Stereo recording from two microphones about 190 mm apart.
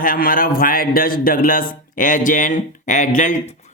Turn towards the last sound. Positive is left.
turn(degrees=40)  # may be behind; listen again after turning